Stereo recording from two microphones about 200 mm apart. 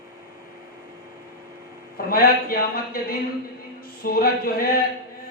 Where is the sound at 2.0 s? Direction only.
50° left (ahead or behind).